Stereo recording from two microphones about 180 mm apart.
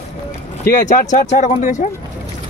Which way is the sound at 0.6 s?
45° left (ahead or behind).